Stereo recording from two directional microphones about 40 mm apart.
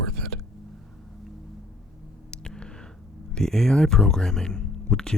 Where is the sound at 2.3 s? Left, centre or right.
Centre.